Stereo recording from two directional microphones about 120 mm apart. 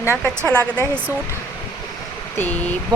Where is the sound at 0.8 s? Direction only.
20° right (ahead or behind).